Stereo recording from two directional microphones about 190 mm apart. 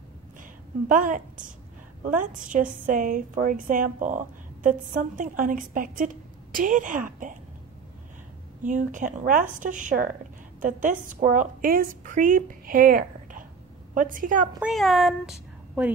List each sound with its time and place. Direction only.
0.4 s a sound: 45° right (ahead or behind)
2.0 s a woman's voice: 45° right (ahead or behind)
8.6 s a woman's voice: 40° right (ahead or behind)
14.6 s speech: centre (ahead or behind)